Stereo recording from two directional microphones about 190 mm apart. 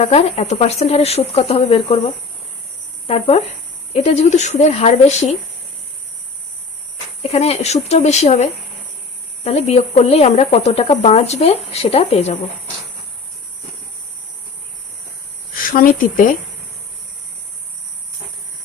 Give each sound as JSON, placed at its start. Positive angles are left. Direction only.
{"t": 0.0, "sound": "speech", "side_deg": 35}
{"t": 3.1, "sound": "speech", "side_deg": 30}
{"t": 7.2, "sound": "speech", "side_deg": 30}
{"t": 15.5, "sound": "speech", "side_deg": 45}